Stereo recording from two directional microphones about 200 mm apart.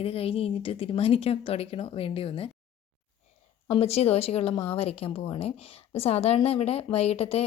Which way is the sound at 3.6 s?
30° left (ahead or behind).